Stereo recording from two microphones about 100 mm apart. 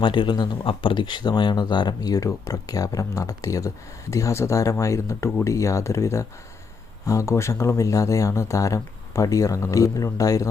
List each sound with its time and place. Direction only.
0.0 s speech: 55° left (ahead or behind); by 10.4 s 35° left (ahead or behind)